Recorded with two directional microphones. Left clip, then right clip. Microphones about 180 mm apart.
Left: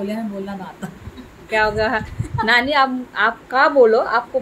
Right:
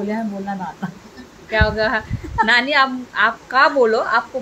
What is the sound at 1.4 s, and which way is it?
A woman's voice, 5° left (ahead or behind).